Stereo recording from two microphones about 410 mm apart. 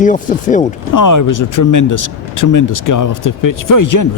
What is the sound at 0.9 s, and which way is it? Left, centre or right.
Speech, left.